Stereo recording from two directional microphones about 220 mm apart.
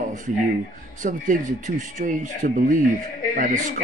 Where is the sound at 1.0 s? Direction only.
35° right (ahead or behind).